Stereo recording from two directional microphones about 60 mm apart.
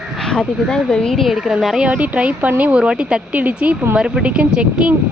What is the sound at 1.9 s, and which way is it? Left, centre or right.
Speech, right.